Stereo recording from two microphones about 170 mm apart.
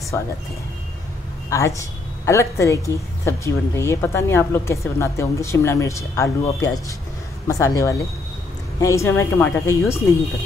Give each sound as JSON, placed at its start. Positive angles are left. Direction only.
{"t": 0.1, "sound": "a woman's voice", "side_deg": 15}
{"t": 1.5, "sound": "a woman's voice", "side_deg": 20}